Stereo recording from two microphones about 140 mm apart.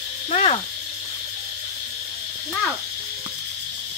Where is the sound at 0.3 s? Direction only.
45° left (ahead or behind).